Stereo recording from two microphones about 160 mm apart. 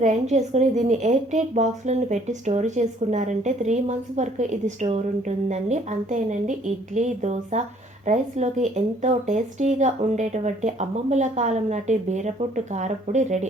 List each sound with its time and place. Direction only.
0.0 s speech: 45° right (ahead or behind)